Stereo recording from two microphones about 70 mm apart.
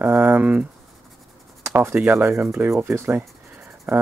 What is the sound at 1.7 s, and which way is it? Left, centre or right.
Speech, right.